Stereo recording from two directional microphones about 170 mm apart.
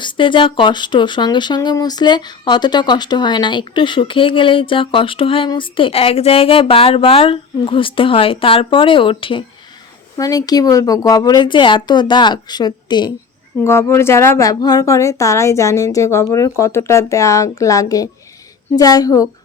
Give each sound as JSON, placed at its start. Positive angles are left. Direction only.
{"t": 0.0, "sound": "speech", "side_deg": 30}
{"t": 13.6, "sound": "a woman's voice", "side_deg": 15}